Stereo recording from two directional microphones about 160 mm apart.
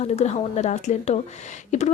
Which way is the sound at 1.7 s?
45° left (ahead or behind).